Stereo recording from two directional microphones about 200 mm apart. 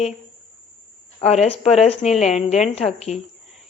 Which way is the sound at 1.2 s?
30° left (ahead or behind).